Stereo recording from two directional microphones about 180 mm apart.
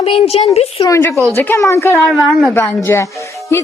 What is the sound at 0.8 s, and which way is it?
Speech, 15° left (ahead or behind).